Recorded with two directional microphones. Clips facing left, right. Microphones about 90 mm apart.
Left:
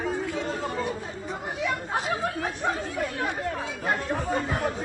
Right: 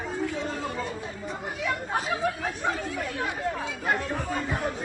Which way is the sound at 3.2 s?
25° left (ahead or behind).